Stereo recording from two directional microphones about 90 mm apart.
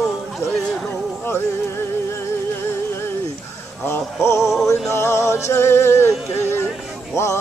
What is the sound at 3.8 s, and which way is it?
Music, 30° left (ahead or behind).